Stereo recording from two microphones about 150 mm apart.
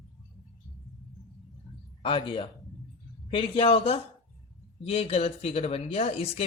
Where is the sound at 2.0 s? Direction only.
35° left (ahead or behind).